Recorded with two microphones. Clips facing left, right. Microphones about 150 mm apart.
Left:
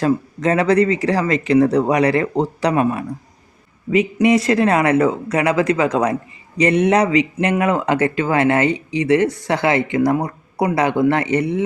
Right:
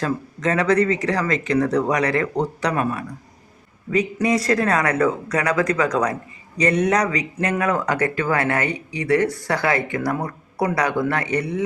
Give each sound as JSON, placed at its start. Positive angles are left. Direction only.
{"t": 0.0, "sound": "speech", "side_deg": 30}